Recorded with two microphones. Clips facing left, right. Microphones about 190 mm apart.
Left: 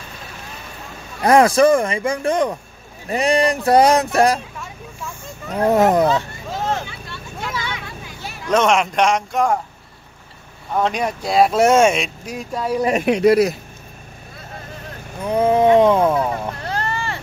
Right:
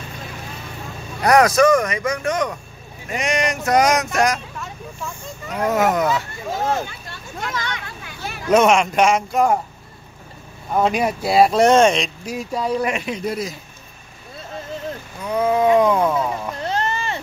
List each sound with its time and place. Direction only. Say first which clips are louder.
1.2 s speech: left 2 dB; 30° left (ahead or behind)
5.5 s speech: left 4 dB; 35° left (ahead or behind)
7.4 s vehicle: even; 5° left (ahead or behind)
8.5 s speech: right 2 dB; 5° right (ahead or behind)
10.7 s speech: right 2 dB; 5° right (ahead or behind)
13.0 s speech: left 11 dB; 75° left (ahead or behind)
15.2 s speech: left 3 dB; 30° left (ahead or behind)
16.6 s vehicle: right 2 dB; 20° right (ahead or behind)